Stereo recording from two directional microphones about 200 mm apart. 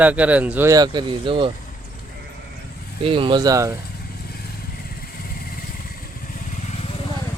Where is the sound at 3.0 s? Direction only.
25° right (ahead or behind).